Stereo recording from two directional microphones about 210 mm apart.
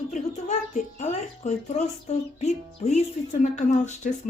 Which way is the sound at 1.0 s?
30° left (ahead or behind).